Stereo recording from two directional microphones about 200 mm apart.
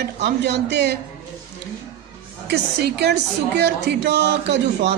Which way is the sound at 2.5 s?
55° right (ahead or behind).